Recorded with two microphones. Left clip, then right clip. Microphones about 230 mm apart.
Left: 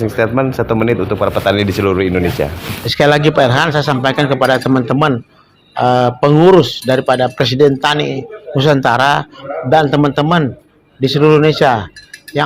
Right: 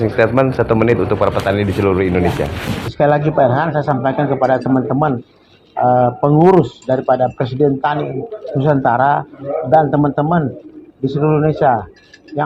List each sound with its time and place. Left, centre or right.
0.0 s speech: left